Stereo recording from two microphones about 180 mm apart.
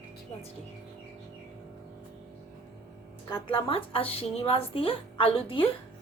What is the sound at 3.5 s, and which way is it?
A woman's voice, 30° left (ahead or behind).